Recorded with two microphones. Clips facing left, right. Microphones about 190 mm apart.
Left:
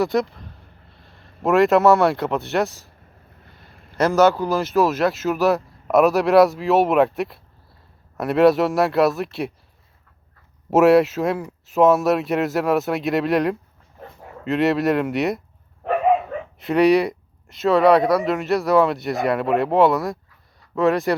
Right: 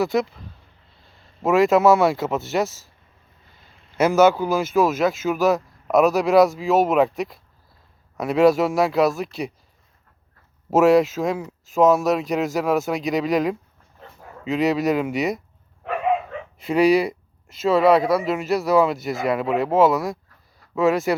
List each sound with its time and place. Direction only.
0.0 s speech: centre (ahead or behind)
3.4 s a sound: 55° left (ahead or behind)
3.9 s speech: 5° right (ahead or behind)
10.7 s speech: 5° left (ahead or behind)
16.6 s speech: centre (ahead or behind)